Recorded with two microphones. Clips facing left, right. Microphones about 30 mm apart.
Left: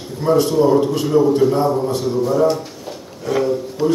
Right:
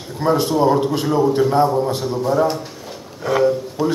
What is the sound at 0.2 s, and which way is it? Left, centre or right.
Speech, centre.